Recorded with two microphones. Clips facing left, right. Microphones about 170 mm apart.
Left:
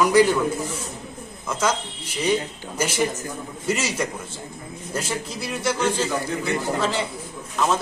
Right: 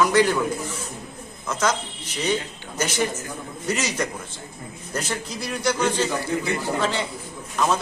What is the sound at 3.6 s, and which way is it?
A man's voice, 5° left (ahead or behind).